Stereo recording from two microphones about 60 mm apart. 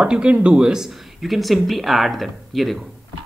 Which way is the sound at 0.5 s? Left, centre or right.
Centre.